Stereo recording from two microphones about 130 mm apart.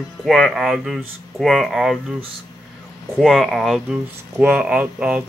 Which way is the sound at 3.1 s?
Centre (ahead or behind).